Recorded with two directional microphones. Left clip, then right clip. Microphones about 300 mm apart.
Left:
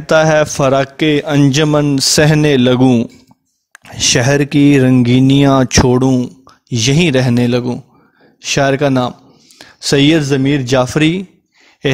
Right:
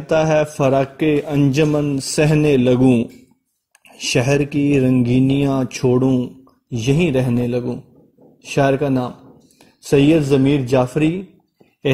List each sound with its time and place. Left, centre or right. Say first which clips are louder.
0.0 s speech: left 6 dB; left